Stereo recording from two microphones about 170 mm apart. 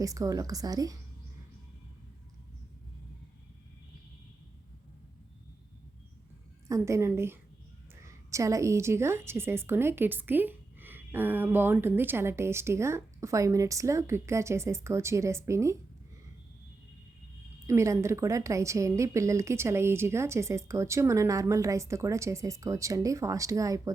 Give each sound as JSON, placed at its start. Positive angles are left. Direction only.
{"t": 0.0, "sound": "a woman's voice", "side_deg": -20}
{"t": 6.7, "sound": "a woman's voice", "side_deg": -15}
{"t": 17.7, "sound": "a woman's voice", "side_deg": -15}